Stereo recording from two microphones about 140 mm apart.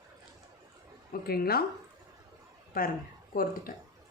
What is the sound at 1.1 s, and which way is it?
Speech, 90° left.